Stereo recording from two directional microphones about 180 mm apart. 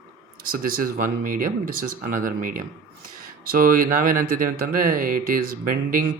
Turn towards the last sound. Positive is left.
turn(degrees=-50)  # may be behind; listen again after turning